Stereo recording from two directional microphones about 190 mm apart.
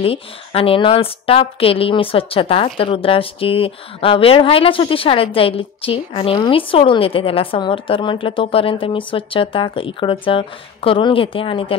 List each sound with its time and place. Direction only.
0.0 s a woman's voice: 30° left (ahead or behind)